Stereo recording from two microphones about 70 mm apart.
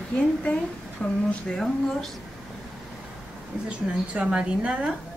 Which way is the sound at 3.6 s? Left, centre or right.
Centre.